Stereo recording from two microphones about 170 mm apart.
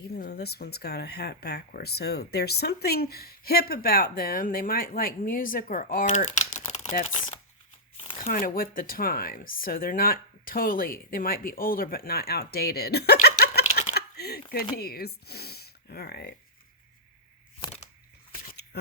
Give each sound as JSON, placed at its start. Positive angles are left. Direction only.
{"t": 0.1, "sound": "speech", "side_deg": 70}
{"t": 7.9, "sound": "crumpling", "side_deg": 35}
{"t": 8.3, "sound": "speech", "side_deg": 55}
{"t": 13.9, "sound": "a sound", "side_deg": 65}
{"t": 14.8, "sound": "speech", "side_deg": 65}
{"t": 18.4, "sound": "shuffling cards", "side_deg": 70}